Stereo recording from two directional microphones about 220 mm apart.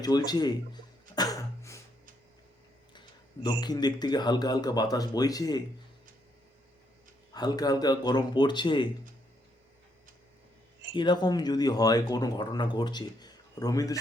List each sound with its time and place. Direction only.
0.0 s speech: 20° left (ahead or behind)
3.4 s speech: 20° left (ahead or behind)
7.3 s a man's voice: 20° left (ahead or behind)
10.9 s speech: 20° left (ahead or behind)